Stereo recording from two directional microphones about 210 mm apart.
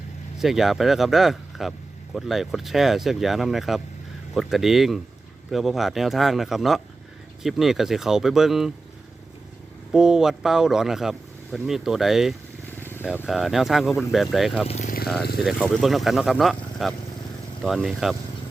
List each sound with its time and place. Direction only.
0.3 s speech: centre (ahead or behind)
9.9 s speech: centre (ahead or behind)
12.8 s vehicle: 10° left (ahead or behind)
13.2 s speech: centre (ahead or behind)
14.7 s speech: 30° left (ahead or behind)
15.4 s speech: centre (ahead or behind)